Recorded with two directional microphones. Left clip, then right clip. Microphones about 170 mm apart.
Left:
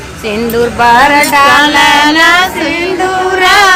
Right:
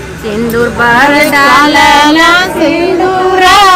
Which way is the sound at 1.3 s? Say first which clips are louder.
Right 1 dB; 15° left (ahead or behind).